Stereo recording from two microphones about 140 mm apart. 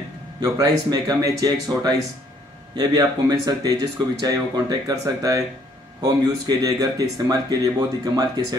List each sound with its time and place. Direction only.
0.4 s speech: 25° right (ahead or behind)